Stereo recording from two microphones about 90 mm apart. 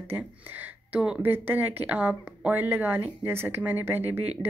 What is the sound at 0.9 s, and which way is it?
Speech, 10° right (ahead or behind).